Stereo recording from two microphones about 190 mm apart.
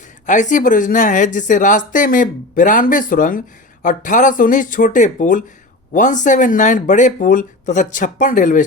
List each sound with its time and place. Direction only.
0.3 s speech: 40° left (ahead or behind)